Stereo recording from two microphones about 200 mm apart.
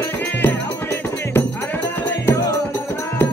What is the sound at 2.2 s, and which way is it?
Music, 15° left (ahead or behind).